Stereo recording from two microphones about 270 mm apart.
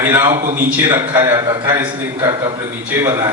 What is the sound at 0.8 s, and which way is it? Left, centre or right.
A man's voice, centre.